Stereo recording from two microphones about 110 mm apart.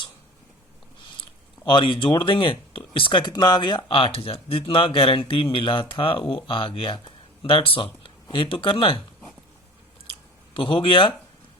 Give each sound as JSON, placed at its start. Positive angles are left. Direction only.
{"t": 1.6, "sound": "speech", "side_deg": 45}
{"t": 10.5, "sound": "speech", "side_deg": 50}